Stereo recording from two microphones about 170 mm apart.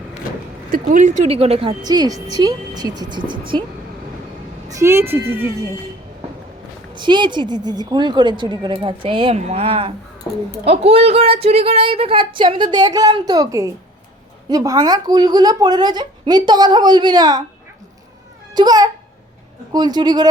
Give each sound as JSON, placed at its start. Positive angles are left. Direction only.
{"t": 0.7, "sound": "speech", "side_deg": -50}
{"t": 1.8, "sound": "a woman's voice", "side_deg": -25}
{"t": 4.7, "sound": "speech", "side_deg": -15}
{"t": 6.9, "sound": "a woman's voice", "side_deg": -25}
{"t": 18.5, "sound": "a woman's voice", "side_deg": -25}